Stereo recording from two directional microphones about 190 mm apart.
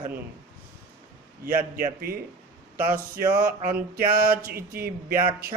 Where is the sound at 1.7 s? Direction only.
50° right (ahead or behind).